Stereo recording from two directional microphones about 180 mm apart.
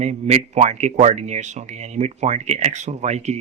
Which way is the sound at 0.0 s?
40° right (ahead or behind).